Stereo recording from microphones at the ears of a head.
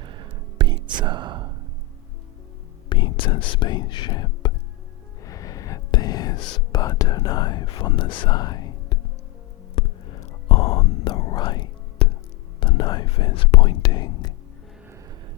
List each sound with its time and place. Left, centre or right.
0.0 s whispering: right
2.9 s speech: left
9.7 s whispering: left
12.5 s speech: left